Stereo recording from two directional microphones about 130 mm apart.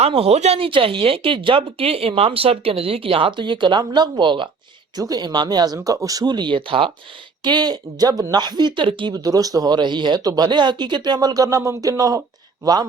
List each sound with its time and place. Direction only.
0.0 s speech: 50° right (ahead or behind)
7.4 s speech: 35° right (ahead or behind)